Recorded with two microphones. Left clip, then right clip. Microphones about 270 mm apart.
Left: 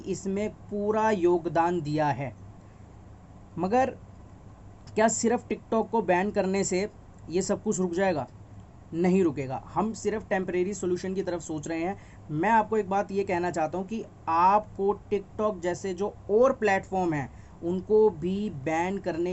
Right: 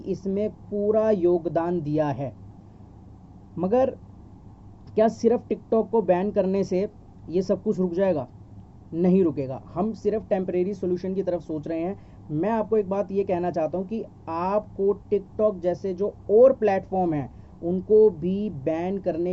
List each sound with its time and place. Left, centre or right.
0.0 s speech: centre
3.6 s speech: centre
4.9 s speech: centre